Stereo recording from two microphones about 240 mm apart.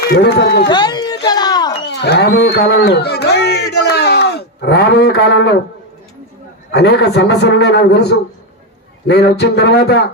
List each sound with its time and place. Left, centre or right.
0.1 s a man's voice: left
0.7 s speech: centre
1.9 s a man's voice: left
3.8 s a sound: left
6.7 s a man's voice: left